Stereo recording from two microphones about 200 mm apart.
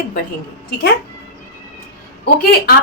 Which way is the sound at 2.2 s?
50° left (ahead or behind).